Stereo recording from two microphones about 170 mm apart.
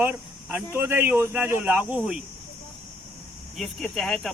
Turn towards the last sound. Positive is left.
turn(degrees=0)  # may be behind; listen again after turning